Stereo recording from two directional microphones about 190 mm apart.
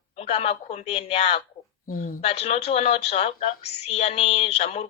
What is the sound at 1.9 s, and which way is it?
Speech, 50° left (ahead or behind).